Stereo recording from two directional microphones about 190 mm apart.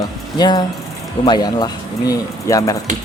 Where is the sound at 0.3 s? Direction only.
20° left (ahead or behind).